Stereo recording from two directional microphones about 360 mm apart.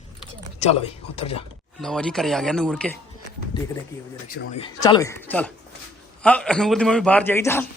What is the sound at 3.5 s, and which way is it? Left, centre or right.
A man's voice, centre.